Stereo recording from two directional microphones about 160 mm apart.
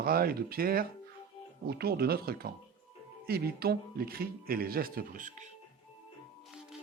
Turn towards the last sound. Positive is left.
turn(degrees=-55)  # may be behind; listen again after turning